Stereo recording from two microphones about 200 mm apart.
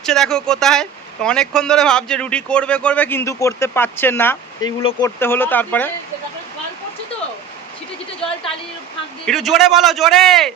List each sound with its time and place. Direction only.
0.0 s speech: 5° left (ahead or behind)
4.8 s speech: 25° left (ahead or behind)
5.0 s speech: 10° left (ahead or behind)
9.2 s speech: centre (ahead or behind)